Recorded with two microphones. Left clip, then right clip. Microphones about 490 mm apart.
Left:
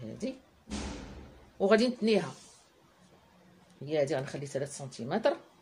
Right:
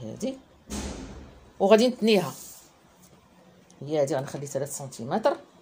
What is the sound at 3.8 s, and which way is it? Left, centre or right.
Speech, left.